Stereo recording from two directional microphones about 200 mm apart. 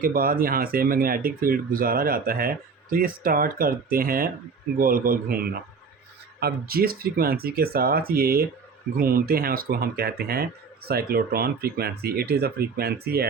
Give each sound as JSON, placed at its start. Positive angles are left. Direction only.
{"t": 0.0, "sound": "speech", "side_deg": -45}